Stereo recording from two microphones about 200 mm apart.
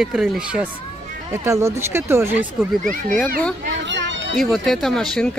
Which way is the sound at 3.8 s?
65° right (ahead or behind).